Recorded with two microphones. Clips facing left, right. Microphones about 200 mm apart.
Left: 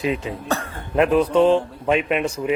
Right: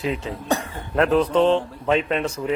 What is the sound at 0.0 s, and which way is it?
Speech, 20° left (ahead or behind).